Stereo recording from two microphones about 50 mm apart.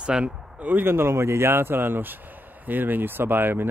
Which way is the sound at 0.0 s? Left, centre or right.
Right.